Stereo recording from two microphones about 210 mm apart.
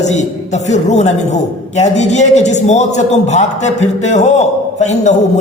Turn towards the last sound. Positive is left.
turn(degrees=30)  # may be behind; listen again after turning